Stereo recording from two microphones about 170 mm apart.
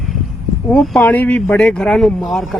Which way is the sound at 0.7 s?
Centre (ahead or behind).